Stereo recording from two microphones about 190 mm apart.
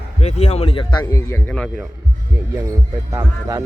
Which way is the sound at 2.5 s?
15° right (ahead or behind).